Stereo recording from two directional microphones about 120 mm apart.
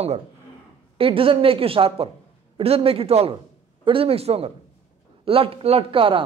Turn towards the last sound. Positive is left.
turn(degrees=-45)  # may be behind; listen again after turning